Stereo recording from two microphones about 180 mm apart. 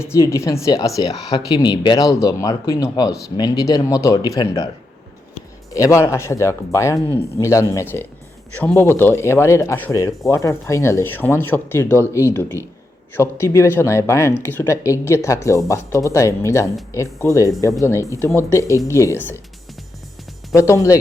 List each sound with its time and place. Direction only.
0.0 s speech: 15° left (ahead or behind)
5.7 s speech: 15° left (ahead or behind)
20.5 s speech: 15° left (ahead or behind)